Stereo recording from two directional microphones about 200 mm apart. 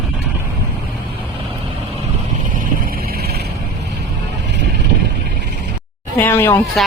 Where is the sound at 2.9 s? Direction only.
50° right (ahead or behind).